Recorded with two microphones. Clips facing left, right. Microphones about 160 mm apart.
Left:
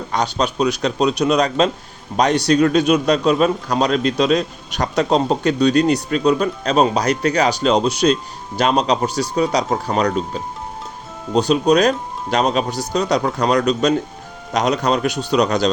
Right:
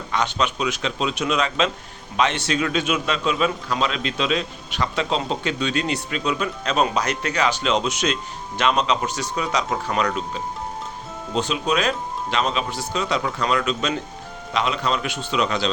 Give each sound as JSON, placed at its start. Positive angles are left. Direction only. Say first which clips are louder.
{"t": 0.1, "sound": "a man's voice", "louder": "left 3 dB", "side_deg": 35}